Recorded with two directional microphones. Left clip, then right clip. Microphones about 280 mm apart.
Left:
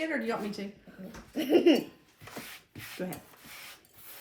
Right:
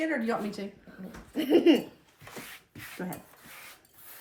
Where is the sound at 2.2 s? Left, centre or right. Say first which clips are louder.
Even; centre.